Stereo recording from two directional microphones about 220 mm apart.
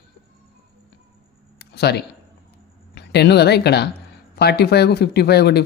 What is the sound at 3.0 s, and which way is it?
A woman's voice, 50° left (ahead or behind).